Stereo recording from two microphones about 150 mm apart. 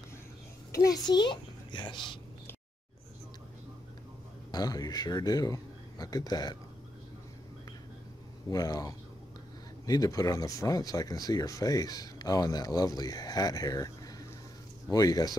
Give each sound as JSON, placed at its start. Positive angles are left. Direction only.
{"t": 0.8, "sound": "a child's voice", "side_deg": 25}
{"t": 4.5, "sound": "speech", "side_deg": 25}
{"t": 8.5, "sound": "speech", "side_deg": 25}